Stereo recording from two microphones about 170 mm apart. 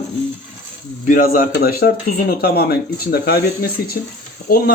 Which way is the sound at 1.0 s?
55° left (ahead or behind).